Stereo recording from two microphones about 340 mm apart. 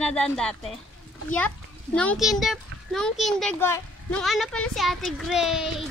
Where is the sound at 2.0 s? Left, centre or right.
Centre.